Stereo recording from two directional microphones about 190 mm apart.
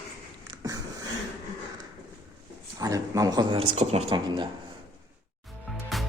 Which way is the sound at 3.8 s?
30° right (ahead or behind).